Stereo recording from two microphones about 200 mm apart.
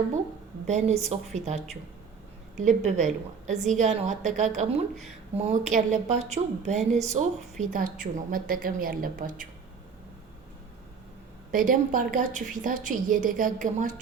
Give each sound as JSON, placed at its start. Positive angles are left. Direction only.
{"t": 0.7, "sound": "a woman's voice", "side_deg": -35}
{"t": 11.5, "sound": "a woman's voice", "side_deg": -45}